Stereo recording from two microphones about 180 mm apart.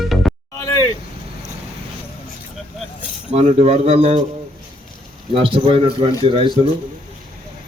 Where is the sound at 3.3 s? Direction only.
35° right (ahead or behind).